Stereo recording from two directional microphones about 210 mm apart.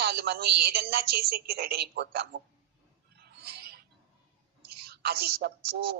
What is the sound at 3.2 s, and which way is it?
Mouse, 50° right (ahead or behind).